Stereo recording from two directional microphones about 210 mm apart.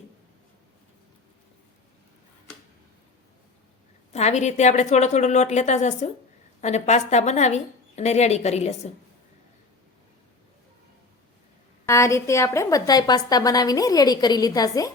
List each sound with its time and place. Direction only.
4.1 s a woman's voice: 30° left (ahead or behind)
11.9 s a woman's voice: 15° left (ahead or behind)